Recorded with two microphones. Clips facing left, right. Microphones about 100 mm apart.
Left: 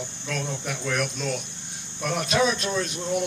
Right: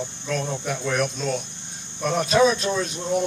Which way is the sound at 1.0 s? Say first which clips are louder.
Right 3 dB; 35° right (ahead or behind).